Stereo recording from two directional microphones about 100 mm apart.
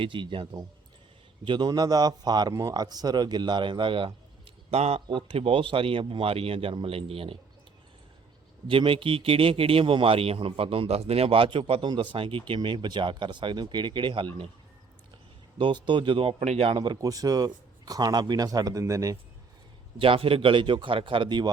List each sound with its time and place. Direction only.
0.0 s speech: 55° right (ahead or behind)
4.7 s speech: 90° right
5.0 s a man's voice: 60° right (ahead or behind)
8.6 s a man's voice: 60° right (ahead or behind)
12.5 s speech: 50° right (ahead or behind)
15.5 s speech: 50° right (ahead or behind); by 16.7 s 80° right
16.7 s speech: 50° right (ahead or behind)
17.0 s speech: 35° right (ahead or behind)
20.0 s speech: 65° right (ahead or behind); by 21.5 s 45° right (ahead or behind)